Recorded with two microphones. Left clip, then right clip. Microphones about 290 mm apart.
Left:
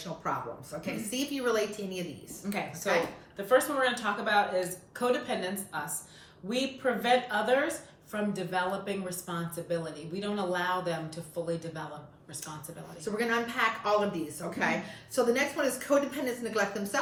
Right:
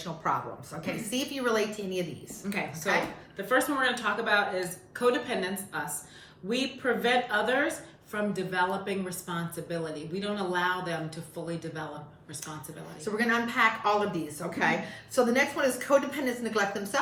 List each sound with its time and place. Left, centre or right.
0.0 s a woman's voice: centre
2.4 s speech: centre
13.1 s a woman's voice: centre